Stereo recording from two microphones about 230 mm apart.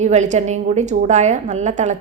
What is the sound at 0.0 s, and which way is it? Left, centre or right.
A woman's voice, right.